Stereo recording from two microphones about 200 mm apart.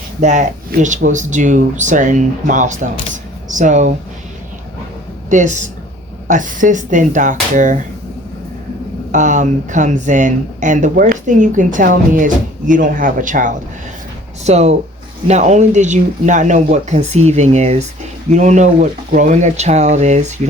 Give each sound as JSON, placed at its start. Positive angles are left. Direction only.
{"t": 0.2, "sound": "speech", "side_deg": -35}
{"t": 5.3, "sound": "speech", "side_deg": -40}
{"t": 9.1, "sound": "speech", "side_deg": -40}